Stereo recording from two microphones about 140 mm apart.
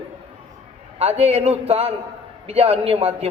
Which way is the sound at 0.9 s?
45° right (ahead or behind).